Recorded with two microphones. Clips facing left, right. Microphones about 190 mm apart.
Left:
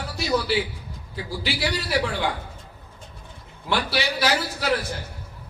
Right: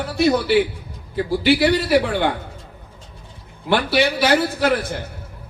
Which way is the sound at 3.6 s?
55° right (ahead or behind).